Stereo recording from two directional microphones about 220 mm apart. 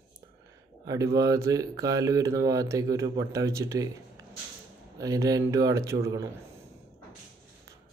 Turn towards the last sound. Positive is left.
turn(degrees=-10)  # may be behind; listen again after turning